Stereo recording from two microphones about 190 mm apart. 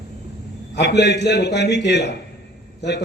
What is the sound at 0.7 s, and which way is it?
A man's voice, 65° left (ahead or behind).